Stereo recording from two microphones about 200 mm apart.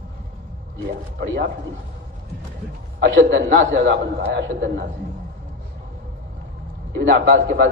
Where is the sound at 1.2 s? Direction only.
50° right (ahead or behind).